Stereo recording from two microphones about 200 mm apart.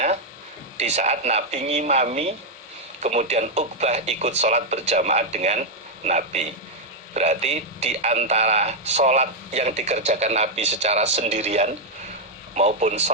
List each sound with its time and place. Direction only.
0.8 s a man's voice: 35° right (ahead or behind)